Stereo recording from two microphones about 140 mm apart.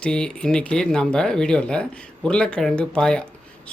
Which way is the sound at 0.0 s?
5° left (ahead or behind).